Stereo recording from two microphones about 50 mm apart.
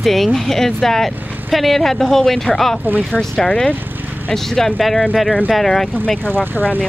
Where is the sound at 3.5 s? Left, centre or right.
Left.